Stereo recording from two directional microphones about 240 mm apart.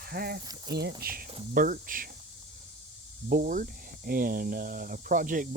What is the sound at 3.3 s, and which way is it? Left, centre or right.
Speech, right.